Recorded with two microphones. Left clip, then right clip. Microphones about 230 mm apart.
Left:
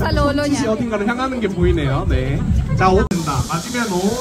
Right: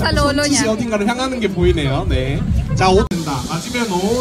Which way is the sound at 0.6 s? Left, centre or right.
Right.